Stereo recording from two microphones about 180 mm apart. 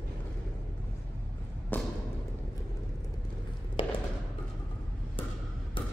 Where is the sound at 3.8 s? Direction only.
30° left (ahead or behind).